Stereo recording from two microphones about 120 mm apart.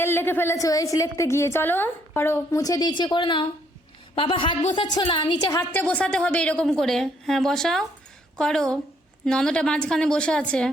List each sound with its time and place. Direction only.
0.0 s a woman's voice: 20° left (ahead or behind); by 5.2 s 40° left (ahead or behind)
5.7 s a woman's voice: 10° left (ahead or behind)